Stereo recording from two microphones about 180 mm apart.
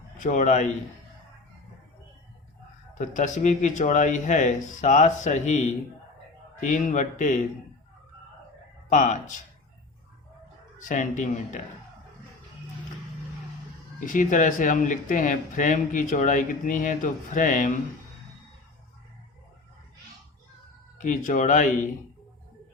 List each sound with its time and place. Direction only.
0.2 s speech: 45° left (ahead or behind)
3.0 s speech: 45° left (ahead or behind)
8.9 s speech: 45° left (ahead or behind)
10.8 s speech: 45° left (ahead or behind)
14.0 s speech: 45° left (ahead or behind)
21.0 s speech: 45° left (ahead or behind)